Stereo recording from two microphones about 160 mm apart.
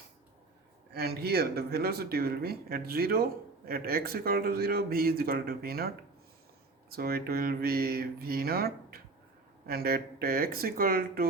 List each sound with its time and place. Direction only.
0.9 s speech: 80° right
6.9 s speech: 70° right (ahead or behind)